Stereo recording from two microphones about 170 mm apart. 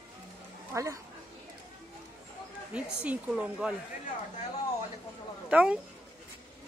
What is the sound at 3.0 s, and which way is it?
Speech, 5° right (ahead or behind).